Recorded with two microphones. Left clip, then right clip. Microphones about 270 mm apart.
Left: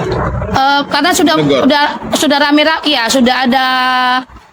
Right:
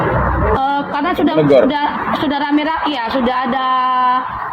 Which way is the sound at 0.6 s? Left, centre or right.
Left.